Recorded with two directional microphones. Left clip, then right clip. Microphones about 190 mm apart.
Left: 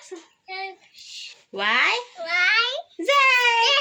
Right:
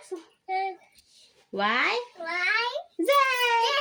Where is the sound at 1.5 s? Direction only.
50° right (ahead or behind).